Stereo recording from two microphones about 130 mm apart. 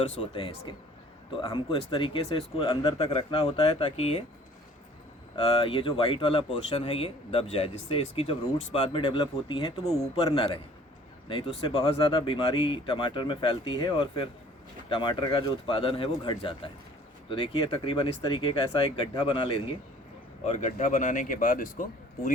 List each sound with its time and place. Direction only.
0.1 s speech: 45° left (ahead or behind)
5.4 s speech: 45° left (ahead or behind)
20.4 s speech: 60° left (ahead or behind); by 22.3 s 90° left